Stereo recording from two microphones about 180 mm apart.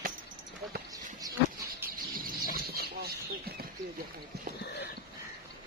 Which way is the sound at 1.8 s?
50° right (ahead or behind).